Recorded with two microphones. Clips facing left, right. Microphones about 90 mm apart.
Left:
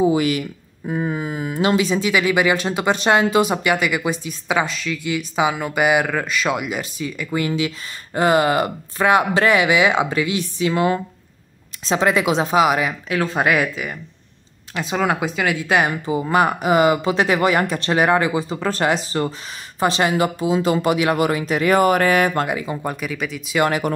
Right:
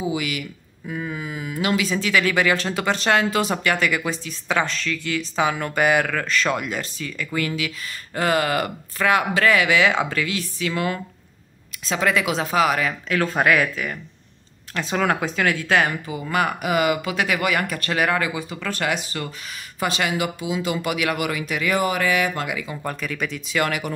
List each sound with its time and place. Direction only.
0.0 s speech: 40° left (ahead or behind); by 16.0 s 15° left (ahead or behind)
16.1 s speech: 25° left (ahead or behind)
22.8 s speech: 15° left (ahead or behind)